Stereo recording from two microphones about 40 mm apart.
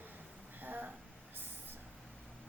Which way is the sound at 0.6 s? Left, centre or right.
Right.